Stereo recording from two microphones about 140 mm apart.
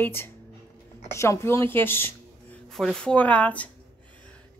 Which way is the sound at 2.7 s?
5° left (ahead or behind).